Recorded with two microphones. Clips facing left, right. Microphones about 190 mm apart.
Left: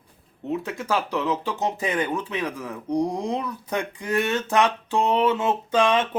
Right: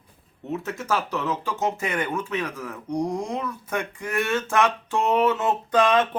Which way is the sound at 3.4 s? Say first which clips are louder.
Left 1 dB; 15° left (ahead or behind).